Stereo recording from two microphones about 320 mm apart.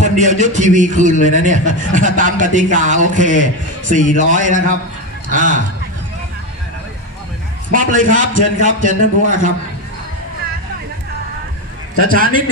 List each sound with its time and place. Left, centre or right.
0.0 s a man's voice: right
7.7 s a man's voice: right
12.0 s a man's voice: right